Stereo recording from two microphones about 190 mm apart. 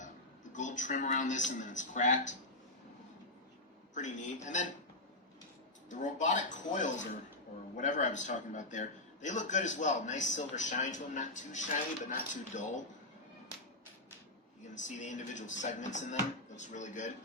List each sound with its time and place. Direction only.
0.5 s a man's voice: 40° left (ahead or behind)
3.9 s a man's voice: 40° left (ahead or behind)
5.9 s a man's voice: 40° left (ahead or behind)
14.8 s a man's voice: 40° left (ahead or behind)